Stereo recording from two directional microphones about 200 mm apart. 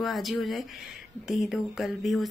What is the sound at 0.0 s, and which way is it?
Speech, centre (ahead or behind).